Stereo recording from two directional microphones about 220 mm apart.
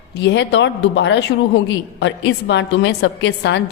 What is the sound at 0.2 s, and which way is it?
A woman's voice, 55° left (ahead or behind).